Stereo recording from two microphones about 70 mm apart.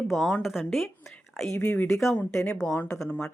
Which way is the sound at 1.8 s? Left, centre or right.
Centre.